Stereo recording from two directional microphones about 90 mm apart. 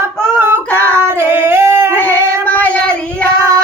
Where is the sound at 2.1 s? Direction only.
30° right (ahead or behind).